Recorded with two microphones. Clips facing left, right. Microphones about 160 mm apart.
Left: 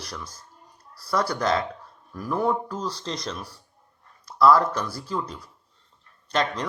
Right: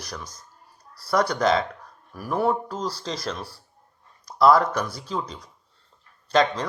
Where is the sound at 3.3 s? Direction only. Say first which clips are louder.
Right 2 dB; 30° right (ahead or behind).